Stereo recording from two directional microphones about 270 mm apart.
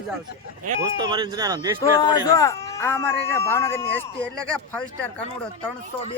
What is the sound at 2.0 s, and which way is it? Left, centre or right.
Speech, centre.